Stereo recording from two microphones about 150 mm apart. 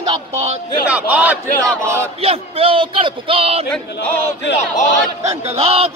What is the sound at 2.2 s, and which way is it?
A man's voice, 40° right (ahead or behind).